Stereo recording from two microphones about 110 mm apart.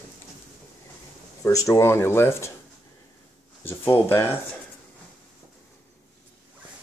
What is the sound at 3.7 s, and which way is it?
Speech, 20° left (ahead or behind).